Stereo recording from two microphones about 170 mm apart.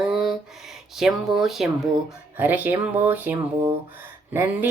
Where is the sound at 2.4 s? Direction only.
10° right (ahead or behind).